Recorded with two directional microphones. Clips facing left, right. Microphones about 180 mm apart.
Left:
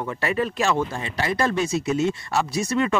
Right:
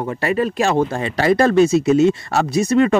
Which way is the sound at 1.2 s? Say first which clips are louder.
Right 10 dB; 90° right.